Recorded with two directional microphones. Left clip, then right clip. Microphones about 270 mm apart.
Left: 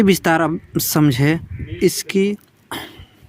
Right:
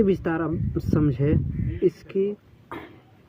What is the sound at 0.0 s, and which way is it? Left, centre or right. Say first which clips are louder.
Speech: left 8 dB; left.